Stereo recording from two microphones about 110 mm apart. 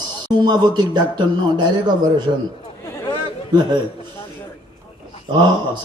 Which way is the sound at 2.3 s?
45° right (ahead or behind).